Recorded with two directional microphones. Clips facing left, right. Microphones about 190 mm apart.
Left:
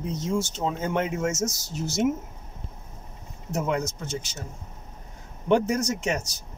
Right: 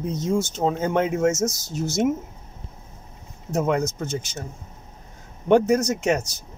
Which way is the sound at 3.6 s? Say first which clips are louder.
Right 5 dB; 50° right (ahead or behind).